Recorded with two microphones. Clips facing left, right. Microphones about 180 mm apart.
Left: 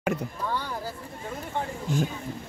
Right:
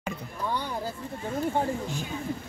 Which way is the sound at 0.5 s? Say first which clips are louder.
Right 3 dB; 15° right (ahead or behind).